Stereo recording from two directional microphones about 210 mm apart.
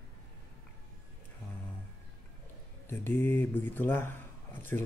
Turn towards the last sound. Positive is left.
turn(degrees=10)  # may be behind; listen again after turning